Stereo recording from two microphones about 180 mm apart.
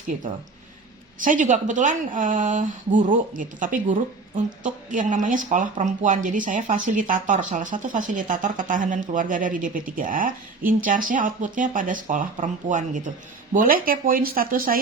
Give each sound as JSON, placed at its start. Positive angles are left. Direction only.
{"t": 1.2, "sound": "speech", "side_deg": -45}